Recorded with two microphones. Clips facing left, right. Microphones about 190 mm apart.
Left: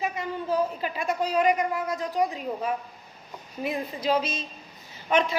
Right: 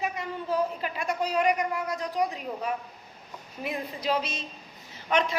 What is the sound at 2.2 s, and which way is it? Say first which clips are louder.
Speech: left 3 dB; 25° left (ahead or behind).